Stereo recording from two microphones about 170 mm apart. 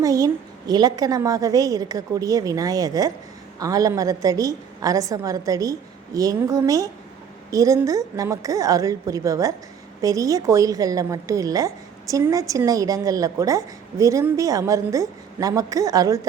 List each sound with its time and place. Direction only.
0.0 s a woman's voice: 20° right (ahead or behind)